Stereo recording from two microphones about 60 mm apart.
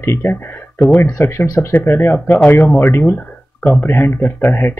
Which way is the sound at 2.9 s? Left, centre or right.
Left.